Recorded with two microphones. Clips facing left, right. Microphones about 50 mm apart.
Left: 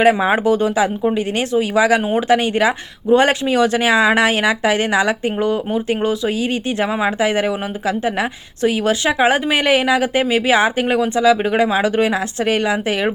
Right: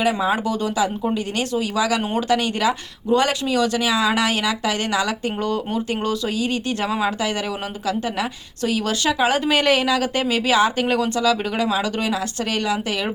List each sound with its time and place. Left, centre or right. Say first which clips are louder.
0.0 s a woman's voice: left 6 dB; left